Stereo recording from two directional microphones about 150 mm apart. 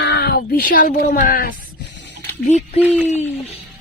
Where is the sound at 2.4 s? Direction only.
50° left (ahead or behind).